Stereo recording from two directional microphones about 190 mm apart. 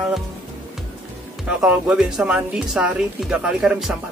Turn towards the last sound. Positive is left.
turn(degrees=-5)  # may be behind; listen again after turning